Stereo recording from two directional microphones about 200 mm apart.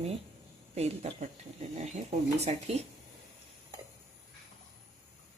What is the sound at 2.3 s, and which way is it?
Speech, 35° right (ahead or behind).